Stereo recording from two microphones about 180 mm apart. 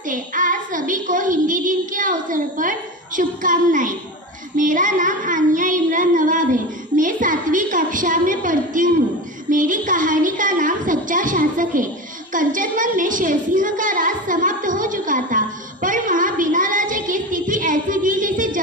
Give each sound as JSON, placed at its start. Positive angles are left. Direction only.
{"t": 0.1, "sound": "a child's voice", "side_deg": -50}
{"t": 4.6, "sound": "child singing", "side_deg": -45}
{"t": 9.5, "sound": "a sound", "side_deg": -45}